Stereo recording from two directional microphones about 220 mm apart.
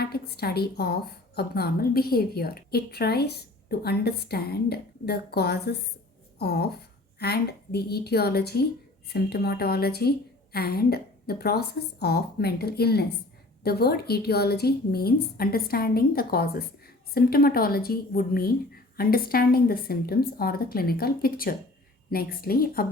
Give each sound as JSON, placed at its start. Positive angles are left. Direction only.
{"t": 0.0, "sound": "a woman's voice", "side_deg": 45}